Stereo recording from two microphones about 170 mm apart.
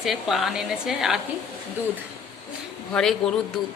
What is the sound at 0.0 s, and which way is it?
Speech, centre (ahead or behind).